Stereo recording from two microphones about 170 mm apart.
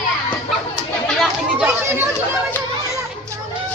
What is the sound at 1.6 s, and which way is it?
Speech, 10° right (ahead or behind).